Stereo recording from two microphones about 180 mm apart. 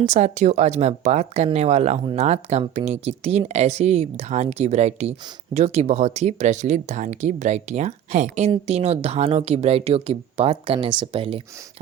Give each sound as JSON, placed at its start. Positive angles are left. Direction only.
{"t": 0.0, "sound": "speech", "side_deg": -40}